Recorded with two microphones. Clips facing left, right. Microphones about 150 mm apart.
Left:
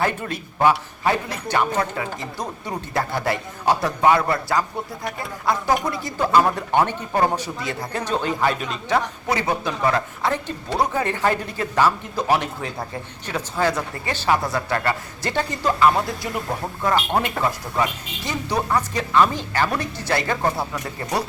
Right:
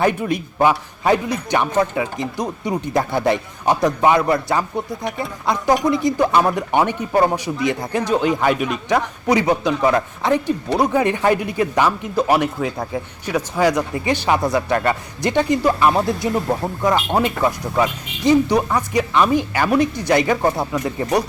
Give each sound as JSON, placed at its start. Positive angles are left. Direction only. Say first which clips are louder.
{"t": 0.0, "sound": "speech", "louder": "right 6 dB", "side_deg": -15}